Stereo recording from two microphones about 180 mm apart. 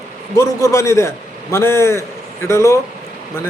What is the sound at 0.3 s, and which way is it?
Speech, 15° left (ahead or behind).